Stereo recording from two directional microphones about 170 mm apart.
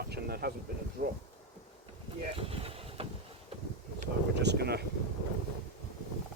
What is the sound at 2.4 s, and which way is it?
Vehicle, 35° right (ahead or behind).